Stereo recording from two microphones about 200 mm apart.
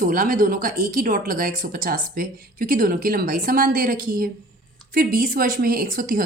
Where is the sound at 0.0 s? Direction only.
45° right (ahead or behind).